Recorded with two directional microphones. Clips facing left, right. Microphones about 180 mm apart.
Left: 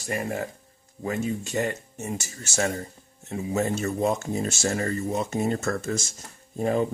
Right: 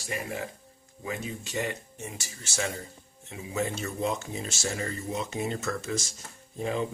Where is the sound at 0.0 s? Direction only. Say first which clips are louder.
Left 5 dB; 45° left (ahead or behind).